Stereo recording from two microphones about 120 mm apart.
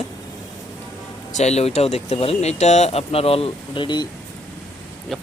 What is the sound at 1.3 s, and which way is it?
Speech, 80° left.